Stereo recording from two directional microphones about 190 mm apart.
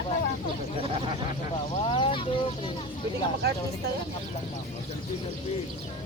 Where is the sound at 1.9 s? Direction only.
25° left (ahead or behind).